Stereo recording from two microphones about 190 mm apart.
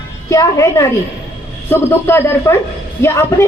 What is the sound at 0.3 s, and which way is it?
A woman's voice, 15° left (ahead or behind).